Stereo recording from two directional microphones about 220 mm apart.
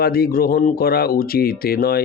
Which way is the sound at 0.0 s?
45° left (ahead or behind).